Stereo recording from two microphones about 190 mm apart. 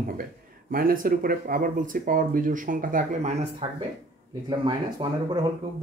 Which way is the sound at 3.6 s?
30° right (ahead or behind).